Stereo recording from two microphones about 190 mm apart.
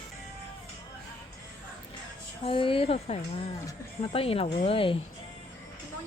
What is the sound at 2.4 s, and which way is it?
Speech, 30° left (ahead or behind).